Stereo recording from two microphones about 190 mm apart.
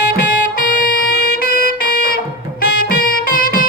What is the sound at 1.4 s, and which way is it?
Music, 50° left (ahead or behind).